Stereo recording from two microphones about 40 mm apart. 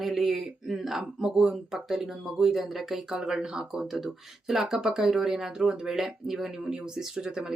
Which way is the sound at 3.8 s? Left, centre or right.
Centre.